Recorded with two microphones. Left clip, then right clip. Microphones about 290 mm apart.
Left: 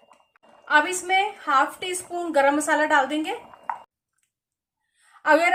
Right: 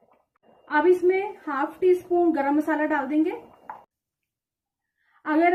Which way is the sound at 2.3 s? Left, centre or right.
Left.